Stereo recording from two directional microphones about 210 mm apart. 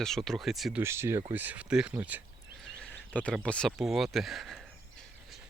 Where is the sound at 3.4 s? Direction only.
5° left (ahead or behind).